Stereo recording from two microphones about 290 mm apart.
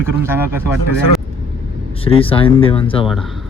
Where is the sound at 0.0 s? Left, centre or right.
Centre.